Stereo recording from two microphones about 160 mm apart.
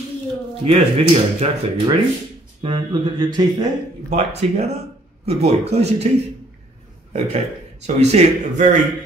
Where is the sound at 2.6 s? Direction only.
30° right (ahead or behind).